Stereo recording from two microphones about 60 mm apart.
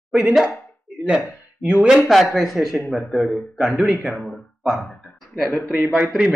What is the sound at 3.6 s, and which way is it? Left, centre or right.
Speech, centre.